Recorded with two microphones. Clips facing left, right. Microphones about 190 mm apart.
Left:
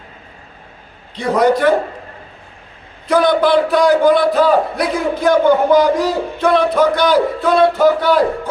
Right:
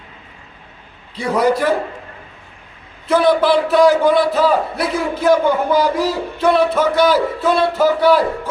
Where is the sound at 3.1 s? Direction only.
5° right (ahead or behind).